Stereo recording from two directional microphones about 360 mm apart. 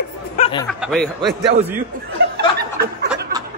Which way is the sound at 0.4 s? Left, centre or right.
Centre.